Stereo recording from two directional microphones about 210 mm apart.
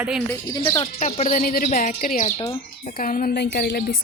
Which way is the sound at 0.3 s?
20° left (ahead or behind).